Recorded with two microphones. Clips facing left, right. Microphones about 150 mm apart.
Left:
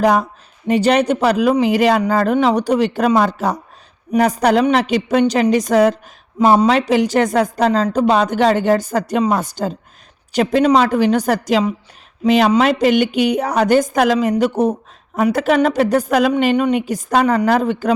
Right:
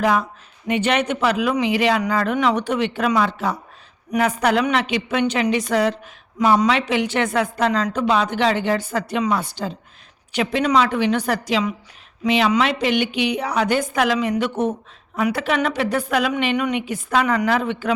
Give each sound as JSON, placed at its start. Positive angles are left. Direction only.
{"t": 0.0, "sound": "a woman's voice", "side_deg": 40}